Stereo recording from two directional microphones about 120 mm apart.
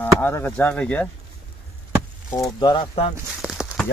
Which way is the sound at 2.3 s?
35° left (ahead or behind).